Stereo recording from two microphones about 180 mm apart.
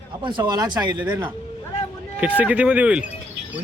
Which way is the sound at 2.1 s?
10° right (ahead or behind).